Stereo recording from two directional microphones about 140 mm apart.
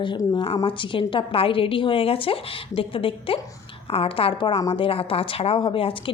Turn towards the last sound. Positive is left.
turn(degrees=40)  # may be behind; listen again after turning